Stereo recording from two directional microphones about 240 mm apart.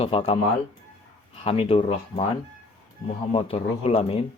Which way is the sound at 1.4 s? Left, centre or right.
Left.